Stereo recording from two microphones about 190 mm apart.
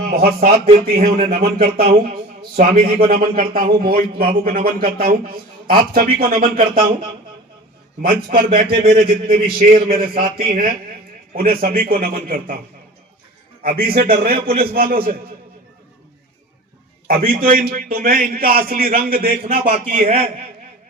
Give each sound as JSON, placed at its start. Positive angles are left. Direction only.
{"t": 0.1, "sound": "speech", "side_deg": -50}
{"t": 8.1, "sound": "speech", "side_deg": -50}
{"t": 13.6, "sound": "a man's voice", "side_deg": -45}
{"t": 17.1, "sound": "speech", "side_deg": -50}
{"t": 19.5, "sound": "a man's voice", "side_deg": -35}